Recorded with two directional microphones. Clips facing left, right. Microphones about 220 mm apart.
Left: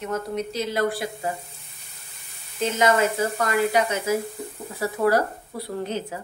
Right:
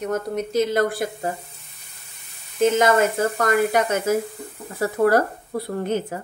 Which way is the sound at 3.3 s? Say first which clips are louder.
Right 2 dB; 50° right (ahead or behind).